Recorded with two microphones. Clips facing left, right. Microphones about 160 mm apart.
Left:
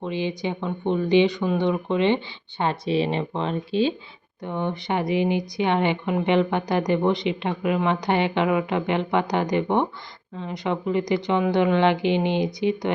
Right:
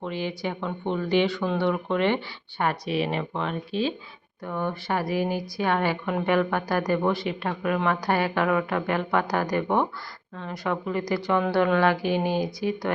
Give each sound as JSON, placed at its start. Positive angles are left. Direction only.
{"t": 0.0, "sound": "speech", "side_deg": 20}